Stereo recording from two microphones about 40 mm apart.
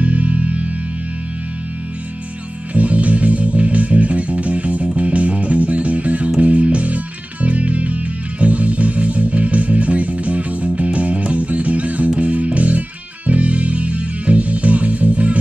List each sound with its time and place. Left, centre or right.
0.0 s music: right
2.7 s music: right